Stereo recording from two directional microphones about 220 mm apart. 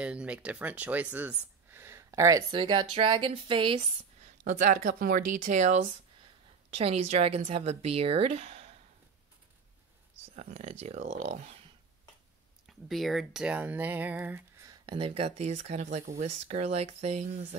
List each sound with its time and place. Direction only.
0.0 s speech: 5° right (ahead or behind); by 3.8 s 25° right (ahead or behind)
4.5 s speech: 40° right (ahead or behind)
10.3 s speech: 30° right (ahead or behind)
12.6 s speech: centre (ahead or behind); by 17.6 s 30° right (ahead or behind)